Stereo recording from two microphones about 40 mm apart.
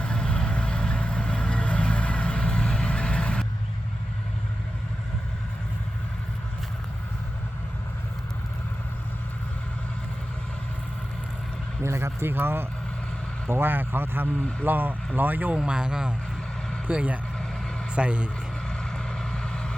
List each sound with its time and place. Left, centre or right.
0.3 s vehicle: left
11.9 s speech: right
15.5 s speech: right
16.8 s speech: right
18.7 s vehicle: centre